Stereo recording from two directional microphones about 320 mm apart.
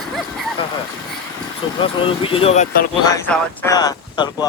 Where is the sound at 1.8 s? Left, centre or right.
Centre.